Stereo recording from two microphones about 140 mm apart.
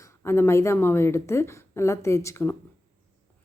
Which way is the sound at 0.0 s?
20° left (ahead or behind).